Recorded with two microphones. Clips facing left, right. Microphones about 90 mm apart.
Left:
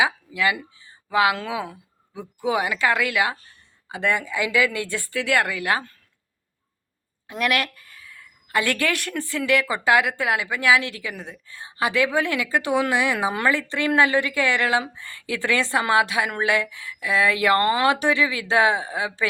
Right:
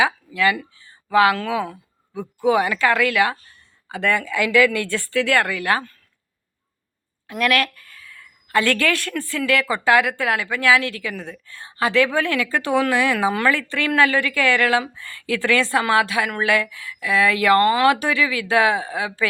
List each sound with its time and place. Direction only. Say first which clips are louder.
0.0 s a woman's voice: right 3 dB; 20° left (ahead or behind)
7.3 s a woman's voice: right 3 dB; 20° left (ahead or behind)